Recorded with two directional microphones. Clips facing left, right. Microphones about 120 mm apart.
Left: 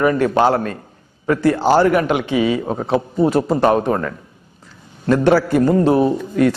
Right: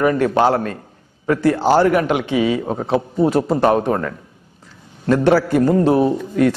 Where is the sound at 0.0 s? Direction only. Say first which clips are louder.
Even; 15° left (ahead or behind).